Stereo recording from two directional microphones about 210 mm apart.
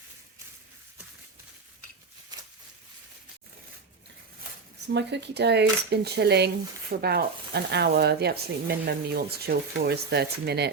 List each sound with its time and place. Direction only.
4.9 s speech: 55° right (ahead or behind)